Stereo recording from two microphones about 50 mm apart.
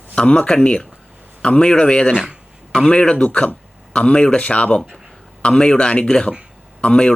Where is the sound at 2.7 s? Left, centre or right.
Centre.